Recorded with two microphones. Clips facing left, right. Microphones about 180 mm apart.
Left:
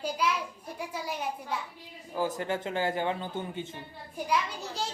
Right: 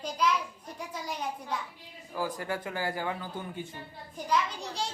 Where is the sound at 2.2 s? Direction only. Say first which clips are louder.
Left 3 dB; 25° left (ahead or behind).